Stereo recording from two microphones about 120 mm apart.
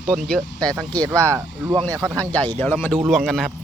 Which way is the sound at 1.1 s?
25° right (ahead or behind).